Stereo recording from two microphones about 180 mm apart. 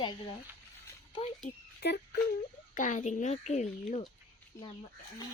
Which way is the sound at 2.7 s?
45° left (ahead or behind).